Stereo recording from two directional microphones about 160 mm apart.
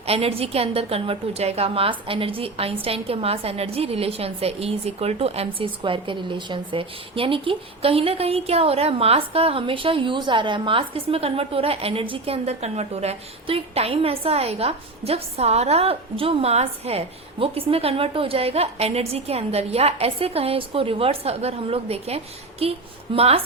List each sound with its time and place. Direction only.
0.0 s a woman's voice: 40° right (ahead or behind)